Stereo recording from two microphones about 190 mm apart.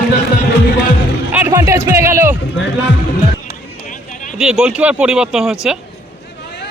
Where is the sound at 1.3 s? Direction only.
10° right (ahead or behind).